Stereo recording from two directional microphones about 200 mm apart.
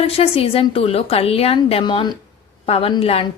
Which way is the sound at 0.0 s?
30° left (ahead or behind).